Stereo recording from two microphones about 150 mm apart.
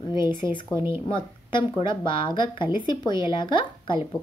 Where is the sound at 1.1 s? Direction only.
30° left (ahead or behind).